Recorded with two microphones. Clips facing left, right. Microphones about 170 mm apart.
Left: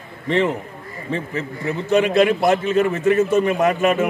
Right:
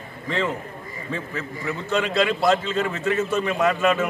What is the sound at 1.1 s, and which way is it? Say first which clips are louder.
A man's voice: left 5 dB; 20° left (ahead or behind).